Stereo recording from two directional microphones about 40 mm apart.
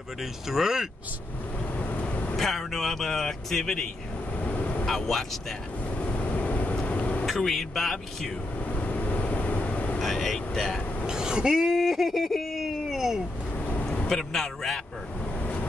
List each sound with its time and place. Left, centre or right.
0.2 s speech: centre
1.8 s vehicle: left
2.3 s speech: centre
4.4 s vehicle: left
4.8 s speech: centre
5.9 s vehicle: left
7.3 s speech: centre
8.5 s vehicle: left
10.0 s speech: centre
11.1 s speech: centre
11.7 s a sound: centre
14.0 s speech: centre